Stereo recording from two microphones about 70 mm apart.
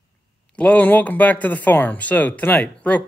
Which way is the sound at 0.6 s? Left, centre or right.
Left.